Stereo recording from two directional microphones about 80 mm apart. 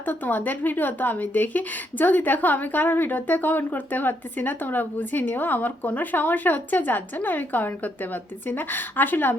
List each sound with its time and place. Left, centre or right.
0.0 s a woman's voice: left